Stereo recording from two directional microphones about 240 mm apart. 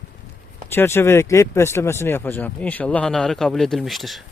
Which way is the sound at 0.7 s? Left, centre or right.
Centre.